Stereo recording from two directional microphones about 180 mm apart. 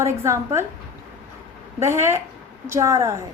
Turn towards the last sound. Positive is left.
turn(degrees=-15)  # may be behind; listen again after turning